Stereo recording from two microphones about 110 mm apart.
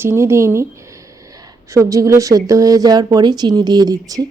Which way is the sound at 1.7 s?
30° right (ahead or behind).